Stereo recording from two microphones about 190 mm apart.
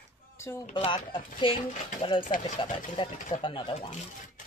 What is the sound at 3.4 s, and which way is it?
Speech, 25° left (ahead or behind).